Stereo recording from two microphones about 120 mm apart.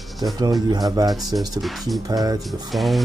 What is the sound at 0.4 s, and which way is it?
Speech, 35° right (ahead or behind).